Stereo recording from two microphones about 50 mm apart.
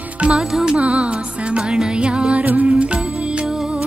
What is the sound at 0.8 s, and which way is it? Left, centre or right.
Music, right.